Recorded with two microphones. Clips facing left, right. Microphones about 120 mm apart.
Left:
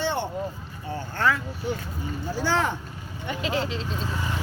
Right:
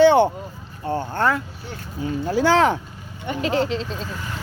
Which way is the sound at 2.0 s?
90° right.